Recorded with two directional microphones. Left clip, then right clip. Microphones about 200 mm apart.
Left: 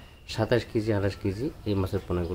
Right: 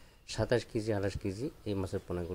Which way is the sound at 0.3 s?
35° right (ahead or behind).